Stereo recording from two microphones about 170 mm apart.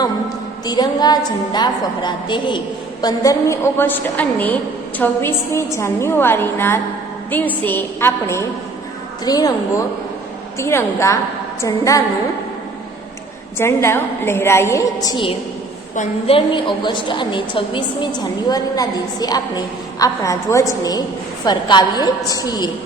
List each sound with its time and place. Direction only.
0.6 s a woman's voice: 25° left (ahead or behind)
13.6 s a woman's voice: 15° left (ahead or behind)